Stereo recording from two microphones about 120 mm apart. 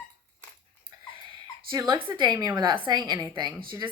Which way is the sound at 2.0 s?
40° right (ahead or behind).